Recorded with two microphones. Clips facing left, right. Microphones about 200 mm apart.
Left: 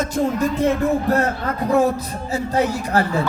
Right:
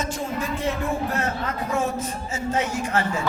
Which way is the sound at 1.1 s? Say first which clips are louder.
Left 7 dB; 40° left (ahead or behind).